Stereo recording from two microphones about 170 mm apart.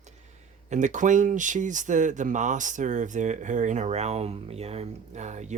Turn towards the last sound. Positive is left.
turn(degrees=-45)  # may be behind; listen again after turning